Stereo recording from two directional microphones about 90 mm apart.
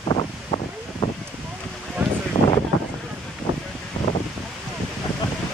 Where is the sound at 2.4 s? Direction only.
55° left (ahead or behind).